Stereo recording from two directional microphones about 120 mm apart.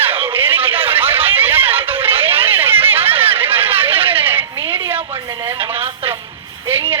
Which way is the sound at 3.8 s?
50° right (ahead or behind).